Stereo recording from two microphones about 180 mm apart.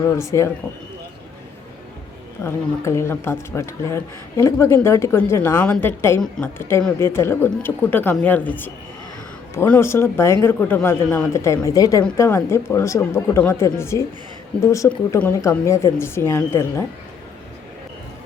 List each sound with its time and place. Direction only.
0.1 s speech: 15° left (ahead or behind)
2.4 s speech: 15° left (ahead or behind)